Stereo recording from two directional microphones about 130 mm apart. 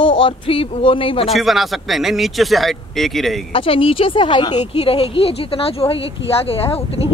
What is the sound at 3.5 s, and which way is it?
Speech, 45° left (ahead or behind).